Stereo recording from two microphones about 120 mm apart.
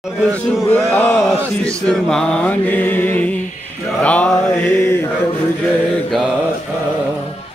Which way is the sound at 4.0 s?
10° left (ahead or behind).